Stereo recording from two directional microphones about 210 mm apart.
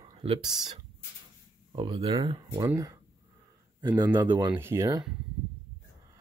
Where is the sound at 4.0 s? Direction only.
20° right (ahead or behind).